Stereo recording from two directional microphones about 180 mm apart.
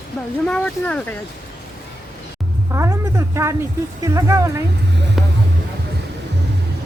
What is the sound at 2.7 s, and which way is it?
A woman's voice, 15° right (ahead or behind).